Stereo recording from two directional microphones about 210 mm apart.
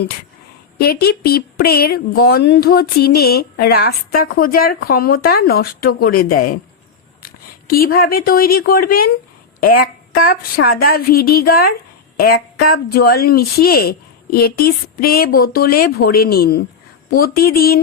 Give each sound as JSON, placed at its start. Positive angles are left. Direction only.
{"t": 0.8, "sound": "speech", "side_deg": 45}